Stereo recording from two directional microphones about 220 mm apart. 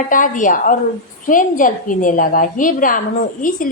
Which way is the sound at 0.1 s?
35° left (ahead or behind).